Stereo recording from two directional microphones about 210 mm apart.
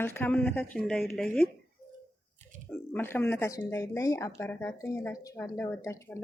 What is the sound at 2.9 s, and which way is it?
Speech, 10° left (ahead or behind).